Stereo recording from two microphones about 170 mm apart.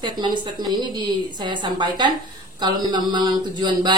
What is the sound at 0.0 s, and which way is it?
A woman's voice, 25° right (ahead or behind).